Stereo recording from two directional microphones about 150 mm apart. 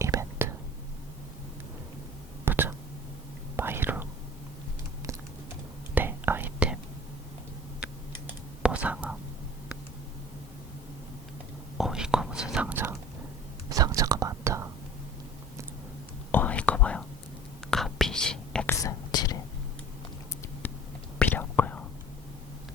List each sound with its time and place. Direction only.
0.0 s whispering: 20° right (ahead or behind)
2.4 s whispering: 15° right (ahead or behind)
5.9 s whispering: 15° right (ahead or behind)
8.6 s whispering: 10° right (ahead or behind)
11.8 s whispering: 5° right (ahead or behind)
13.7 s whispering: 25° right (ahead or behind)
16.3 s whispering: 10° left (ahead or behind)
18.7 s whispering: 20° left (ahead or behind)
20.6 s whispering: 10° left (ahead or behind)